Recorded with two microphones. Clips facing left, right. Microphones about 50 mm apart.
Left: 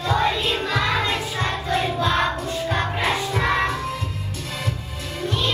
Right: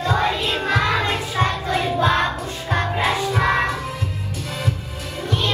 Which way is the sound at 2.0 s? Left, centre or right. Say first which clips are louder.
Right 2 dB; right.